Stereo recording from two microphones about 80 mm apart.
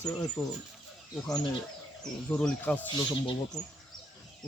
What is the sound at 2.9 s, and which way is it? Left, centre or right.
Speech, left.